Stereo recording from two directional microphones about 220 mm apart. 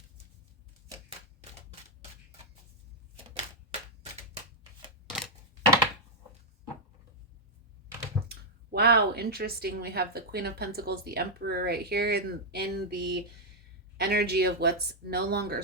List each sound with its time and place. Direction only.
3.2 s typewriter: 30° right (ahead or behind)
5.0 s scissors: centre (ahead or behind)
8.3 s speech: 45° right (ahead or behind)